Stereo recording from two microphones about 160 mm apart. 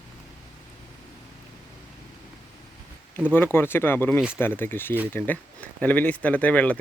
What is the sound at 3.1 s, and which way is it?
Speech, 15° left (ahead or behind).